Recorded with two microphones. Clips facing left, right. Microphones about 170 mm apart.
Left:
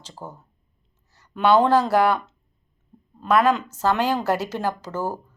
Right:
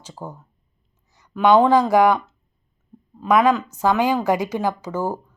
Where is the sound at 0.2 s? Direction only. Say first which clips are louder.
Right 3 dB; 10° right (ahead or behind).